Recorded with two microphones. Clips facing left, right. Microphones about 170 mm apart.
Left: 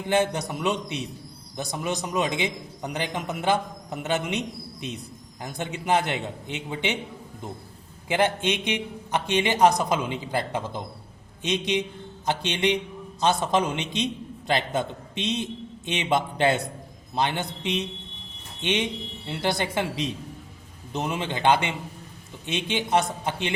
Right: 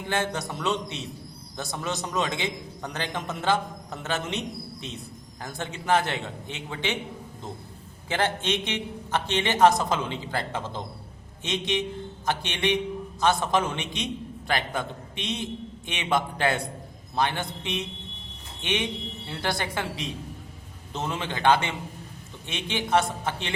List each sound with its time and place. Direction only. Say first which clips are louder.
0.1 s a man's voice: left 5 dB; 20° left (ahead or behind)
8.0 s a man's voice: left 3 dB; 15° left (ahead or behind)